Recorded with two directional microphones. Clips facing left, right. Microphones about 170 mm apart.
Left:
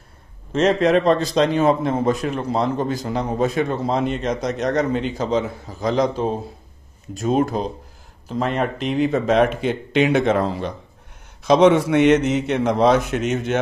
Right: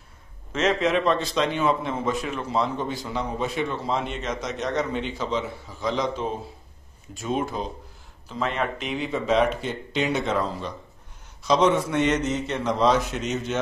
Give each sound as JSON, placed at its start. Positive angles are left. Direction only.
{"t": 0.5, "sound": "a man's voice", "side_deg": 35}
{"t": 4.5, "sound": "a man's voice", "side_deg": 60}
{"t": 5.1, "sound": "a man's voice", "side_deg": 45}
{"t": 9.6, "sound": "a man's voice", "side_deg": 65}